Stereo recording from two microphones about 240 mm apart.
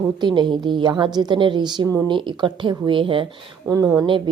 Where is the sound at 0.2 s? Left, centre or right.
Centre.